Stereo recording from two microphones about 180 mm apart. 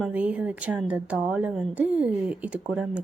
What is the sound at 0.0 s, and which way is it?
Speech, 5° right (ahead or behind).